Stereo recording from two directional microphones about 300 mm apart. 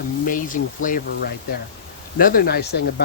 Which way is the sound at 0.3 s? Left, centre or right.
Left.